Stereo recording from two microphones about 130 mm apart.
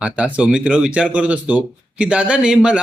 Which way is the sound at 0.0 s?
10° right (ahead or behind).